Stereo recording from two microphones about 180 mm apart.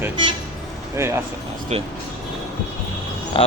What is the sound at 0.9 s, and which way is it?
Speech, 15° right (ahead or behind).